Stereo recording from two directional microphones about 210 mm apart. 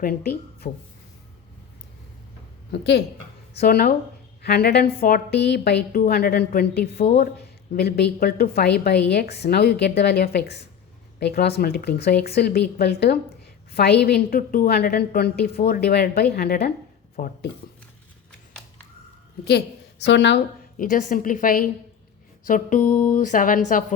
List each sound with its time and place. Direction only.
0.0 s a woman's voice: 45° left (ahead or behind)
2.7 s a woman's voice: 55° left (ahead or behind)
19.5 s a woman's voice: 50° left (ahead or behind)
20.7 s a woman's voice: 40° left (ahead or behind)